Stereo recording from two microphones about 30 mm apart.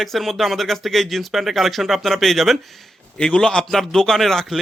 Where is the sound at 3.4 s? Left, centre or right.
Centre.